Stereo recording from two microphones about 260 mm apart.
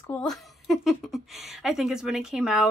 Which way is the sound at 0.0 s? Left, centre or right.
Centre.